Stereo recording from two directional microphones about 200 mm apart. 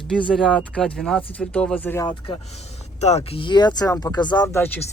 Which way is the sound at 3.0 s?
35° left (ahead or behind).